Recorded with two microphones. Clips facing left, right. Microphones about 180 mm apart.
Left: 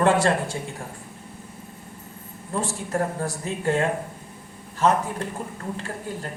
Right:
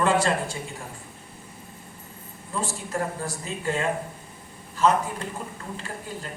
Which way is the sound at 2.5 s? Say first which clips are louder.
Left 3 dB; 65° left (ahead or behind).